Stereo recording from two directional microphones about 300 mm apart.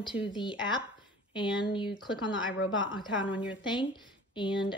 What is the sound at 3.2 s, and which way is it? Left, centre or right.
Speech, centre.